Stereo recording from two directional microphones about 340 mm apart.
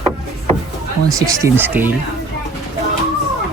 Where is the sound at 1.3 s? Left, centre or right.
Centre.